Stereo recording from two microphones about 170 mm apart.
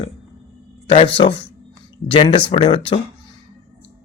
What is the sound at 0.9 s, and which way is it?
Speech, 35° left (ahead or behind).